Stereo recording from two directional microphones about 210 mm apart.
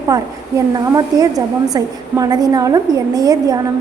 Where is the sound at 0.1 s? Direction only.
15° right (ahead or behind).